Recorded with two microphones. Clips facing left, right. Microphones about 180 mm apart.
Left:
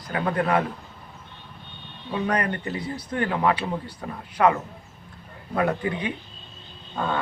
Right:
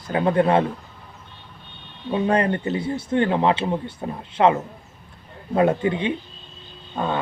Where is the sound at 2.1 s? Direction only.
25° right (ahead or behind).